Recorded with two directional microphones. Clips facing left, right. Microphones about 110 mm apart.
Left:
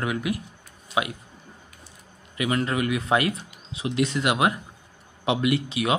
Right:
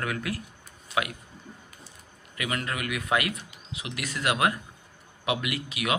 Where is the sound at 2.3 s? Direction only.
25° left (ahead or behind).